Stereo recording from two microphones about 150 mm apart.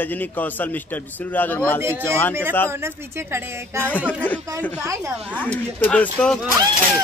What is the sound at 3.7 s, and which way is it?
Speech, 10° left (ahead or behind).